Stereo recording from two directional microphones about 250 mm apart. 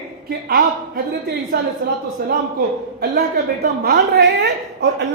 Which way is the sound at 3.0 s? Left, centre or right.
Right.